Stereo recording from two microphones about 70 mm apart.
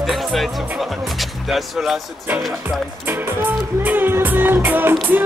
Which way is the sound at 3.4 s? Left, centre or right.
Right.